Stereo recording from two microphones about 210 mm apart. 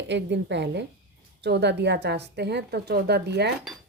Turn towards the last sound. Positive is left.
turn(degrees=-50)  # may be behind; listen again after turning